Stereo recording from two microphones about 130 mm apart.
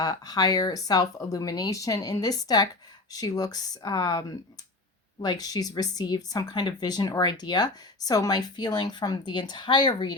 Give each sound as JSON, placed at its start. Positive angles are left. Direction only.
{"t": 0.0, "sound": "speech", "side_deg": 30}